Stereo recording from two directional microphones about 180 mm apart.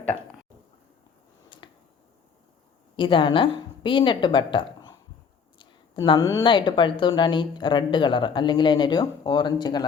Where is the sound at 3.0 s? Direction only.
30° left (ahead or behind).